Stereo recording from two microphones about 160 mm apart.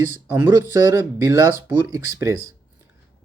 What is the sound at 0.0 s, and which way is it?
Speech, 15° right (ahead or behind).